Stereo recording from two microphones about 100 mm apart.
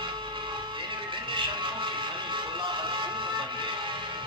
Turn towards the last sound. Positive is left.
turn(degrees=-55)  # may be behind; listen again after turning